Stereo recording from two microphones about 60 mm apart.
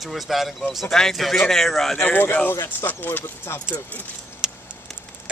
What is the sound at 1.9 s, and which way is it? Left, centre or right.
Speech, left.